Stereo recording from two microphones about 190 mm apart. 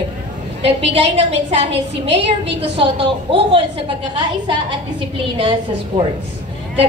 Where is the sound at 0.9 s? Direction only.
35° right (ahead or behind).